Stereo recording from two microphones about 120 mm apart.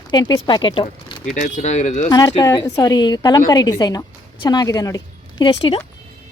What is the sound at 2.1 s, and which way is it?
Speech, 35° left (ahead or behind).